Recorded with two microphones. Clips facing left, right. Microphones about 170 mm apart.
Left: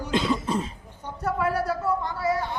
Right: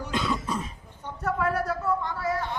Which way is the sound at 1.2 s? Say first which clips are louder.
Left 1 dB; 10° left (ahead or behind).